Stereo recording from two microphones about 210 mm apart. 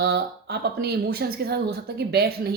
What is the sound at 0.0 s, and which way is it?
Speech, 50° right (ahead or behind).